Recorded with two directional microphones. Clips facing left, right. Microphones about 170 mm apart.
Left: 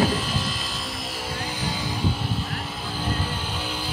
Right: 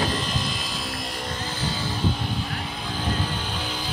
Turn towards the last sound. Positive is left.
turn(degrees=10)  # may be behind; listen again after turning